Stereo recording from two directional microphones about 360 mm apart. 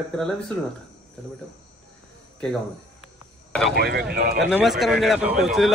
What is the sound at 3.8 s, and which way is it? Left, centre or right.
Speech, right.